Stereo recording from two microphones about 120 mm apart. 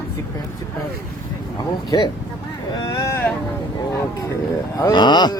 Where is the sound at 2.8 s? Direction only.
40° left (ahead or behind).